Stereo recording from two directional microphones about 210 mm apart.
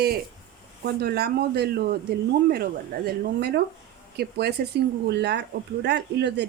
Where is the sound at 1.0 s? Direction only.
50° right (ahead or behind).